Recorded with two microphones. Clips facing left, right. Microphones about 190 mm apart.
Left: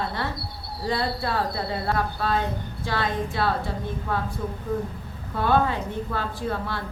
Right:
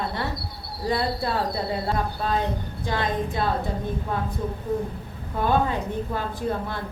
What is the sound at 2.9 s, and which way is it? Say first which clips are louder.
Speech: right 1 dB; 20° right (ahead or behind).